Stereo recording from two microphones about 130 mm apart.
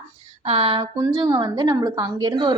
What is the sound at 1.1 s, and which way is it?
A woman's voice, 30° right (ahead or behind).